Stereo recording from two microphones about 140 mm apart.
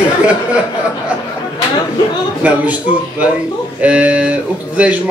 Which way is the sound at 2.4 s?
10° right (ahead or behind).